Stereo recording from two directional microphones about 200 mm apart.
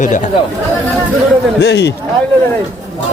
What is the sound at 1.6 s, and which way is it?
Speech, 60° left (ahead or behind).